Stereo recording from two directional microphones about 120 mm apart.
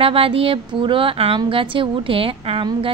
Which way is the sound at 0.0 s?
50° right (ahead or behind).